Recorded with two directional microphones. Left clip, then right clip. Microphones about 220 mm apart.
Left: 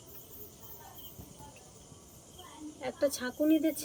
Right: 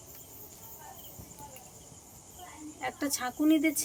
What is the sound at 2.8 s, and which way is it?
Speech, 45° right (ahead or behind).